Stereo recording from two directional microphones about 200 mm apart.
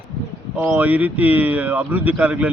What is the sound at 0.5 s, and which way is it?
Speech, 5° right (ahead or behind).